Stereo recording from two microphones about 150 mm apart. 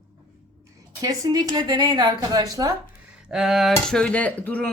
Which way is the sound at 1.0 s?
25° right (ahead or behind).